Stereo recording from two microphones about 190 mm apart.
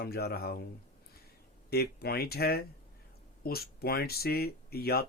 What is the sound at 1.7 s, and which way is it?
Speech, 55° left (ahead or behind).